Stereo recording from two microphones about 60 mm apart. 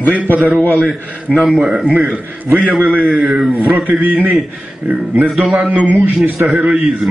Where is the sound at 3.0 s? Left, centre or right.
Centre.